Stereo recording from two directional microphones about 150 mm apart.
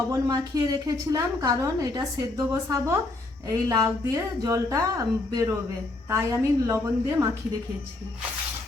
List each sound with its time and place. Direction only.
0.1 s a woman's voice: 25° right (ahead or behind)